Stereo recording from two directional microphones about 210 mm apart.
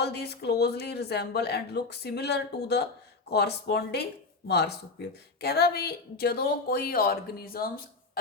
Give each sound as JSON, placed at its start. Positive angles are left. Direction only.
{"t": 0.0, "sound": "speech", "side_deg": 50}